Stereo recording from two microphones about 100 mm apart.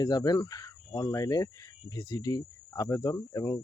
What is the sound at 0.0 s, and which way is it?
Speech, 40° left (ahead or behind).